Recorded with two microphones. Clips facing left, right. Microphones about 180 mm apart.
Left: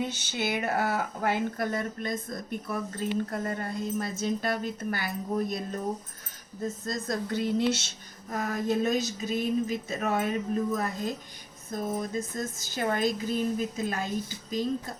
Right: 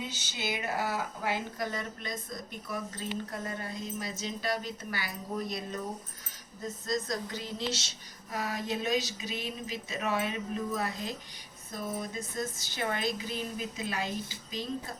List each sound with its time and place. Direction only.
0.0 s speech: 60° left (ahead or behind)
6.8 s speech: 50° left (ahead or behind)